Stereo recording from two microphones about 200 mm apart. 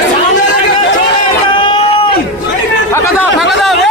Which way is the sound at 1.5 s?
25° left (ahead or behind).